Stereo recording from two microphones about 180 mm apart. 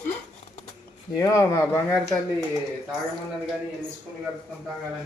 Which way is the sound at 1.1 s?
20° left (ahead or behind).